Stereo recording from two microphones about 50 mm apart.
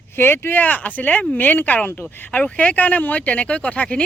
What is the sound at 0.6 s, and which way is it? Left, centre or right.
Speech, left.